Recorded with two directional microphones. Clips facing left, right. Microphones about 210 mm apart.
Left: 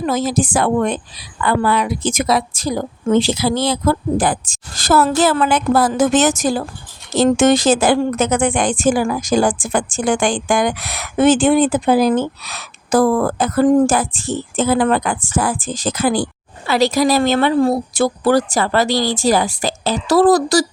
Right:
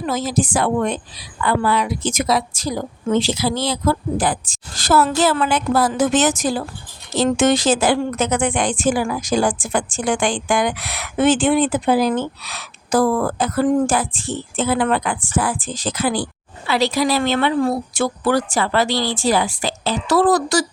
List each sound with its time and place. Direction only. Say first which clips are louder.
0.0 s a woman's voice: left 3 dB; 50° left (ahead or behind)